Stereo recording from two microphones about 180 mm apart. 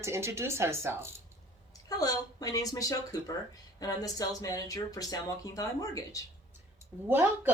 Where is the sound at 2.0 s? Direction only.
20° left (ahead or behind).